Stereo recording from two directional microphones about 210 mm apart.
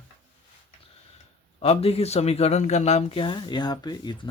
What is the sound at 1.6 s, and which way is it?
Speech, 30° left (ahead or behind).